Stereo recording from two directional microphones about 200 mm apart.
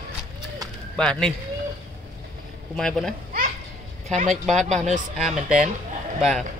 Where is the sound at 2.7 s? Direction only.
Centre (ahead or behind).